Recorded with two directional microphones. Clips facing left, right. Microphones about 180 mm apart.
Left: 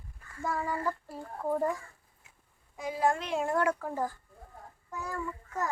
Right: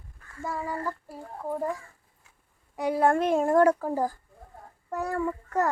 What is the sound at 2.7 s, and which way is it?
A child's voice, 65° right (ahead or behind).